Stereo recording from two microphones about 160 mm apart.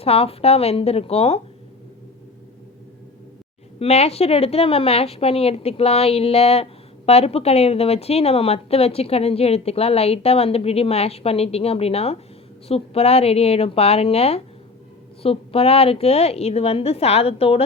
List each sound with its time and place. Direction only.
0.0 s a woman's voice: 40° left (ahead or behind)
3.8 s a woman's voice: 40° left (ahead or behind)